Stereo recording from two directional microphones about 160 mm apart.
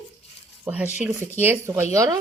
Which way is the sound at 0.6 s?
10° right (ahead or behind).